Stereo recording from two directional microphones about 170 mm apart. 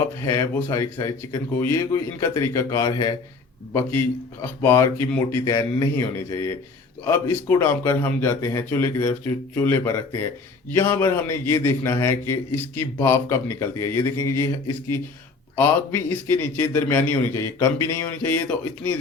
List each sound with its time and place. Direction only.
0.2 s a man's voice: 15° left (ahead or behind)
15.5 s a man's voice: 10° left (ahead or behind)